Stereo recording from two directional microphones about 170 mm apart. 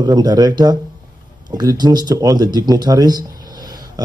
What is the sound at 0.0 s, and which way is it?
Speech, 25° right (ahead or behind).